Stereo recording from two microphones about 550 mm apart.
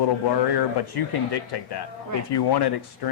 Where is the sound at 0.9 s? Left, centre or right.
Left.